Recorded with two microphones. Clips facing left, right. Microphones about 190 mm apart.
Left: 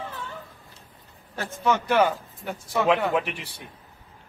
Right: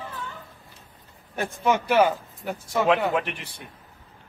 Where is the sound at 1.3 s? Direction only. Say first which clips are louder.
Right 1 dB; 15° right (ahead or behind).